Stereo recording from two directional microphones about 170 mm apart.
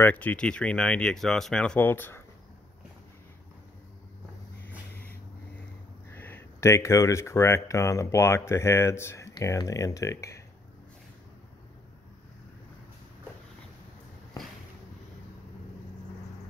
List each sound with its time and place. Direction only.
0.0 s speech: 10° left (ahead or behind)
6.1 s speech: 10° left (ahead or behind)